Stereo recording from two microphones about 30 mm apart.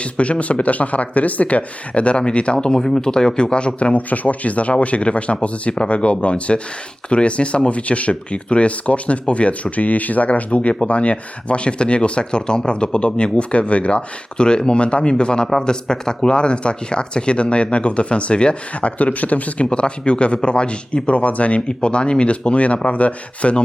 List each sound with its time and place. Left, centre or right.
0.0 s speech: left
3.9 s speech: left
14.4 s speech: left
18.9 s speech: left
19.7 s speech: left
21.7 s speech: left